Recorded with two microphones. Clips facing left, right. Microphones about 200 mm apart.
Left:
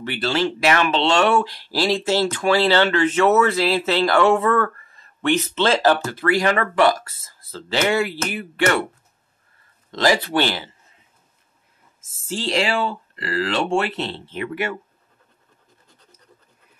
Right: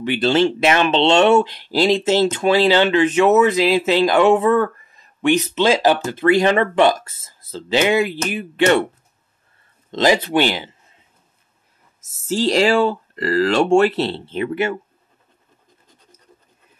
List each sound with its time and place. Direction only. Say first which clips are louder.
0.0 s speech: right 6 dB; 20° right (ahead or behind)
9.8 s speech: right 3 dB; 20° right (ahead or behind)
12.0 s speech: right 8 dB; 40° right (ahead or behind)